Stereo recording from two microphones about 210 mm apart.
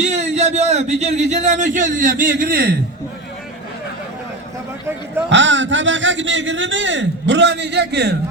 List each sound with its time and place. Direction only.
0.0 s a man's voice: 35° right (ahead or behind)
5.3 s a man's voice: 60° right (ahead or behind)